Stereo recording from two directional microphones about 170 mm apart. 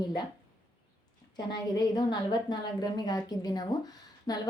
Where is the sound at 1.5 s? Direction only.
25° left (ahead or behind).